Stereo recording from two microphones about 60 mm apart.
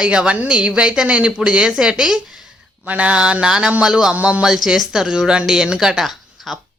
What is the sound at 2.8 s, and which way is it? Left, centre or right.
Speech, right.